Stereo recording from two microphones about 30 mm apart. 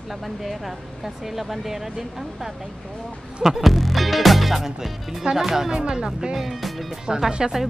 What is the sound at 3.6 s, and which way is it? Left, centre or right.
Speech, centre.